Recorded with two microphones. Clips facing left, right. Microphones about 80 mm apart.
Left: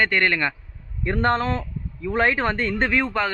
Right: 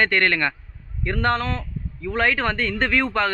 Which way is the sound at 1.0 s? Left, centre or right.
Left.